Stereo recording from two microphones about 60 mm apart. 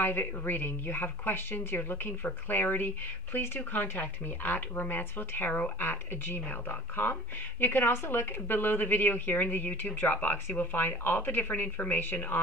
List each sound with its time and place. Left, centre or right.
0.0 s speech: left